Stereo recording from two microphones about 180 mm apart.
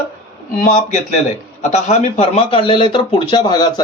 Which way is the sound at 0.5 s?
50° left (ahead or behind).